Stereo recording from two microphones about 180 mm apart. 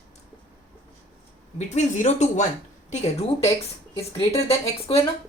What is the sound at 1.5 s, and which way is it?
Speech, 40° left (ahead or behind).